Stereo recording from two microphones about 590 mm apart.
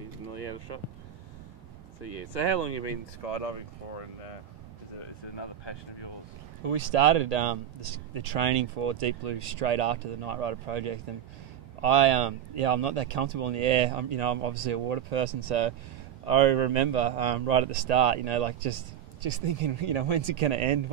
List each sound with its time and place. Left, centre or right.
3.3 s speech: left
5.4 s speech: left
6.6 s speech: right